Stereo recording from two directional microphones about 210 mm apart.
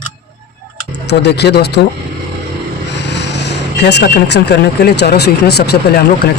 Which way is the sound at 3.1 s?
55° left (ahead or behind).